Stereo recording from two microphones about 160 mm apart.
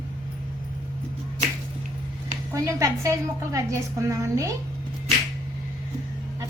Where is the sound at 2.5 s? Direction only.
20° right (ahead or behind).